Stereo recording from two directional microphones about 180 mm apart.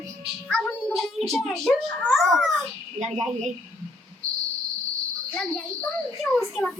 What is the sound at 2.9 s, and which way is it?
Speech, 40° right (ahead or behind).